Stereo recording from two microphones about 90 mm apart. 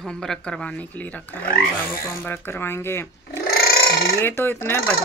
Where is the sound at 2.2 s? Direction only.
25° left (ahead or behind).